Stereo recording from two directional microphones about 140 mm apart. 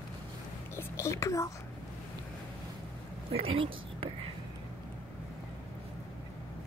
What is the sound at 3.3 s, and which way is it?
Speech, 40° right (ahead or behind).